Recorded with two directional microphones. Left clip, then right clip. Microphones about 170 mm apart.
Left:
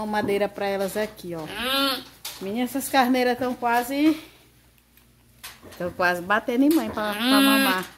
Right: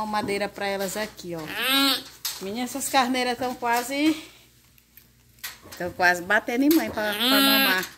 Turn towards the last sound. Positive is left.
turn(degrees=15)  # may be behind; listen again after turning